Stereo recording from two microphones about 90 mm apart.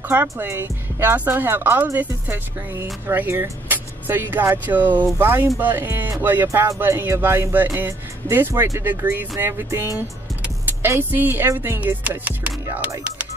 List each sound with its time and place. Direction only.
0.1 s speech: 25° right (ahead or behind)
10.9 s speech: 25° right (ahead or behind)